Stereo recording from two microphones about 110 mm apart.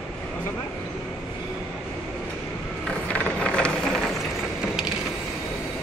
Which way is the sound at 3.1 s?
10° left (ahead or behind).